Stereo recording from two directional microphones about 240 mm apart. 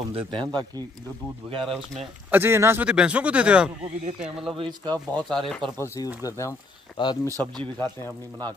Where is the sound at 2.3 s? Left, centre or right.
Centre.